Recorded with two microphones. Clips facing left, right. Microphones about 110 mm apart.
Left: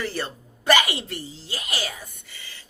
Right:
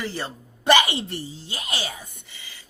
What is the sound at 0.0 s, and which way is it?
Speech, 20° right (ahead or behind).